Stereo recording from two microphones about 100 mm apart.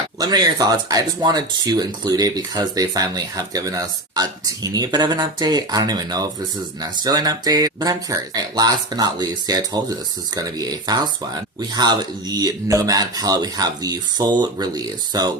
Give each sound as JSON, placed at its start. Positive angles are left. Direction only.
{"t": 0.2, "sound": "speech", "side_deg": -40}